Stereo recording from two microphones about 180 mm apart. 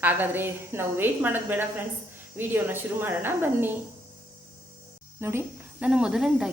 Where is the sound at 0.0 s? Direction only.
10° right (ahead or behind).